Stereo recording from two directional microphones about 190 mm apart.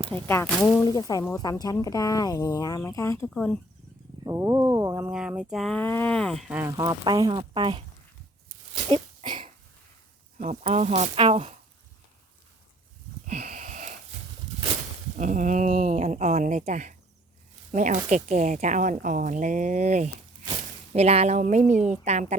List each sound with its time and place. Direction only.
0.1 s speech: 10° left (ahead or behind)
3.2 s speech: 5° left (ahead or behind)
4.2 s speech: 15° right (ahead or behind)
8.7 s a sound: 25° right (ahead or behind)
10.3 s speech: 40° right (ahead or behind)
13.2 s wheeze: 40° right (ahead or behind)
15.1 s speech: 40° right (ahead or behind)